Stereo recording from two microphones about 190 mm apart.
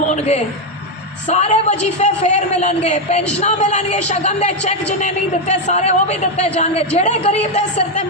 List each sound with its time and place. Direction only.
1.3 s a woman's voice: 35° left (ahead or behind)